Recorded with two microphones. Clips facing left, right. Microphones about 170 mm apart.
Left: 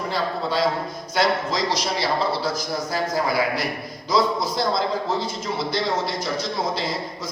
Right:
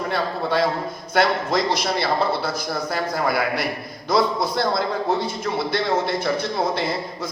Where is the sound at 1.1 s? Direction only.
55° right (ahead or behind).